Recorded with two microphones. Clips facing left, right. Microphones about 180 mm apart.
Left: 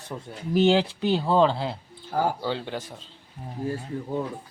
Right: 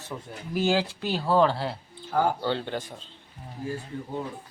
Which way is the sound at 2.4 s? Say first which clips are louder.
Right 1 dB; 5° left (ahead or behind).